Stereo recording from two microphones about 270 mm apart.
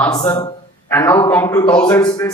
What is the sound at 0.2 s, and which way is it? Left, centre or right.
A man's voice, centre.